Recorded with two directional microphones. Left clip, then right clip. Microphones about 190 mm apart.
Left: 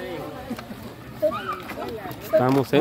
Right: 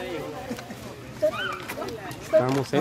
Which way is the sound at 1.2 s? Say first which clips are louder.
Left 1 dB; 60° right (ahead or behind).